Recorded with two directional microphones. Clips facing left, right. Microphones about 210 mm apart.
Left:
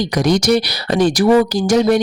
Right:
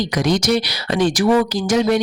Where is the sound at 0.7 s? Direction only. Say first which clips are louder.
Left 3 dB; 35° left (ahead or behind).